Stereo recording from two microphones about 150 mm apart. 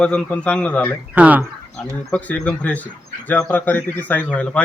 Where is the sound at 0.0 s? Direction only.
5° left (ahead or behind).